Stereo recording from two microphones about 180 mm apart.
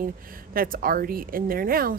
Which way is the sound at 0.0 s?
50° right (ahead or behind).